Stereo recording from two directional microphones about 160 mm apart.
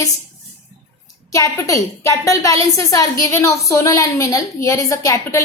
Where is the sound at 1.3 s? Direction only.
20° left (ahead or behind).